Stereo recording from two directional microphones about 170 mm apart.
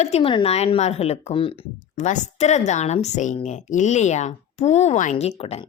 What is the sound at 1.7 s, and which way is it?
Speech, 45° left (ahead or behind).